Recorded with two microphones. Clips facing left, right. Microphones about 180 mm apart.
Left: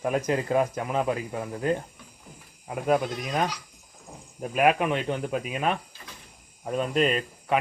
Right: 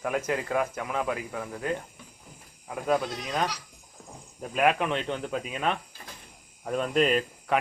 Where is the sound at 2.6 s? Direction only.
15° left (ahead or behind).